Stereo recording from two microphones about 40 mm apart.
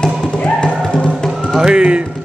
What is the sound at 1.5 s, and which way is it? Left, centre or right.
Music, right.